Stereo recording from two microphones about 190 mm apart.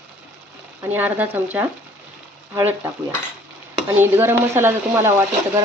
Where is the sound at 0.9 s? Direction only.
10° right (ahead or behind).